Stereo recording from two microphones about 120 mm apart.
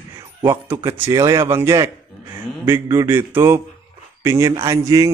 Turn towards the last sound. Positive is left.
turn(degrees=-30)  # may be behind; listen again after turning